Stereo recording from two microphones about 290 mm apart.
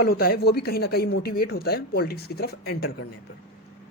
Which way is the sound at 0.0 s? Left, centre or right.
Left.